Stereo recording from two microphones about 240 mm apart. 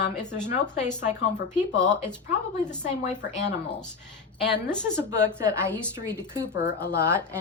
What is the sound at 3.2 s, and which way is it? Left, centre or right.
Speech, left.